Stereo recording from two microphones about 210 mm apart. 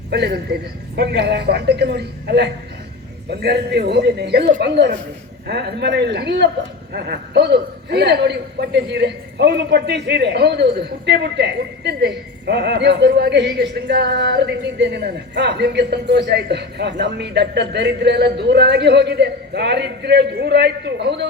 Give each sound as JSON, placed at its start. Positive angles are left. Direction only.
{"t": 0.1, "sound": "a man's voice", "side_deg": -50}